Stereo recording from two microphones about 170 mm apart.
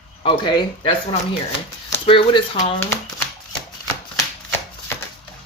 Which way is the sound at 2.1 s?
30° left (ahead or behind).